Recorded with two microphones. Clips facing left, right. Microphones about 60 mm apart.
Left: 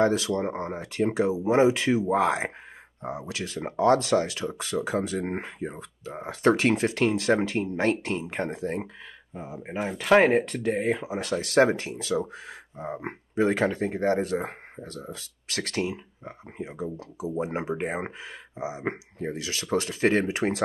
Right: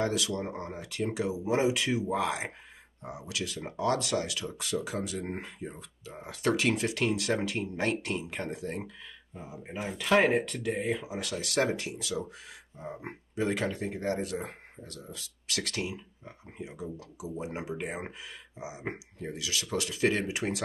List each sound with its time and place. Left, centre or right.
0.0 s speech: left